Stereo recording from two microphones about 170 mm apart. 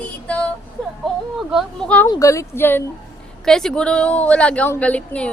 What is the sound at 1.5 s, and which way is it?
Speech, centre (ahead or behind).